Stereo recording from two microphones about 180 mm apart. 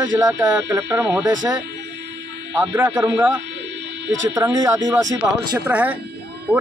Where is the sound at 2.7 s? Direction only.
10° right (ahead or behind).